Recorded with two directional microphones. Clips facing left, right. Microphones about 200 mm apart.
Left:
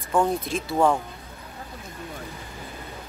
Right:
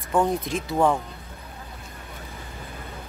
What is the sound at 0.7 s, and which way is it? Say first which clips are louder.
Speech: even; 10° left (ahead or behind).